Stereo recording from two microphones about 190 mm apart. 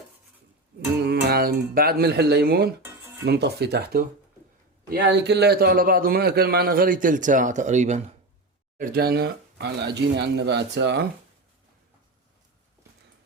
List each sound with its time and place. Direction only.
1.0 s a man's voice: 55° right (ahead or behind); by 8.1 s 40° right (ahead or behind)
8.8 s speech: 50° right (ahead or behind)